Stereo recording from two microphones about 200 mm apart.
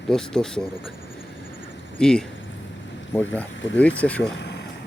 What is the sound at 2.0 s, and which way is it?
Speech, 5° left (ahead or behind).